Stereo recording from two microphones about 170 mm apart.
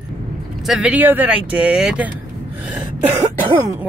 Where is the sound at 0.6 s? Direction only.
5° right (ahead or behind).